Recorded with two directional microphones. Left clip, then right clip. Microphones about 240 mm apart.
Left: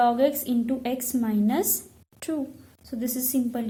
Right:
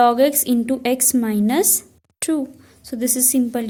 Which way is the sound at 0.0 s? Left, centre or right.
Right.